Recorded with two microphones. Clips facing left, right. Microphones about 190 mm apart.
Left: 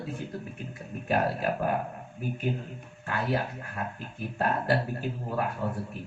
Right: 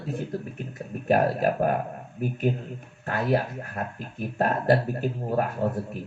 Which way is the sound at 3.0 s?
40° right (ahead or behind).